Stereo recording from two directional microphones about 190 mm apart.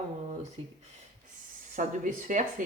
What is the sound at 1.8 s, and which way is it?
Speech, 40° right (ahead or behind).